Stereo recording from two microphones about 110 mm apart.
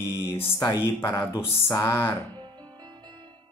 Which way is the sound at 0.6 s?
35° left (ahead or behind).